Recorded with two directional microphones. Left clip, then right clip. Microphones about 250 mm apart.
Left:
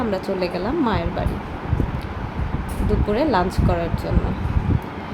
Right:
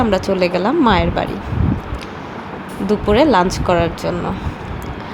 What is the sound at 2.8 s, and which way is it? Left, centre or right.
Speech, right.